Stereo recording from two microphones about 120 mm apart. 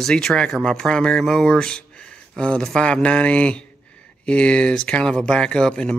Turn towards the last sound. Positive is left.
turn(degrees=5)  # may be behind; listen again after turning